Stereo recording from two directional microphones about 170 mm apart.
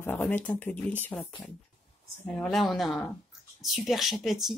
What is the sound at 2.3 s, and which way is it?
Speech, centre (ahead or behind).